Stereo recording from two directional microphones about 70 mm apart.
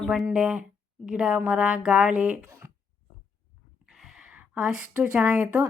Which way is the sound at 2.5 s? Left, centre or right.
Right.